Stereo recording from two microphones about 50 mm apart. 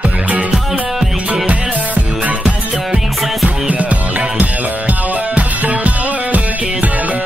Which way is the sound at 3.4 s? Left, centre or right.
Right.